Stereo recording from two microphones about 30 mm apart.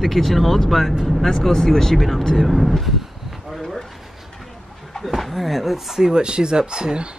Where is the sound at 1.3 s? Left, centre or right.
Centre.